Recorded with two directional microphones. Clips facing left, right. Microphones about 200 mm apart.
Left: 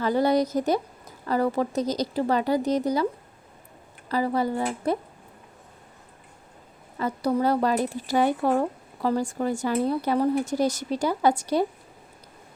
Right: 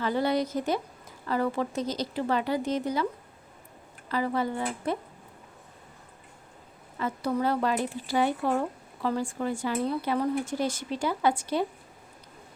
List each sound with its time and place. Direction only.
0.0 s speech: 40° left (ahead or behind)
4.1 s speech: 35° left (ahead or behind)
7.0 s speech: 35° left (ahead or behind)